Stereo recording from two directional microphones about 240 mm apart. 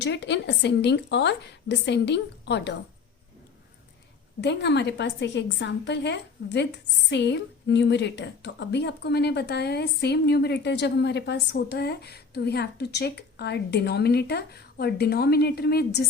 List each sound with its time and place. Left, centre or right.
0.0 s a woman's voice: left
4.4 s a woman's voice: left